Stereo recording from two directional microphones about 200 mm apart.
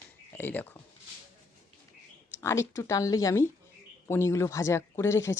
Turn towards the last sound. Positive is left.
turn(degrees=15)  # may be behind; listen again after turning